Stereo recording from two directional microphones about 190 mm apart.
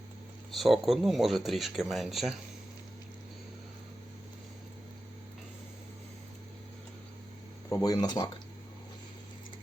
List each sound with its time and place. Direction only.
0.5 s speech: centre (ahead or behind)
7.7 s speech: 20° left (ahead or behind)